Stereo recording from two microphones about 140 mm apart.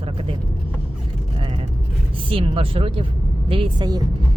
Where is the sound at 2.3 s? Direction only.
40° right (ahead or behind).